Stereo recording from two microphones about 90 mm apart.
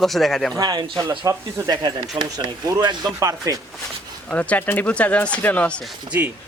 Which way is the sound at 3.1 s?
40° right (ahead or behind).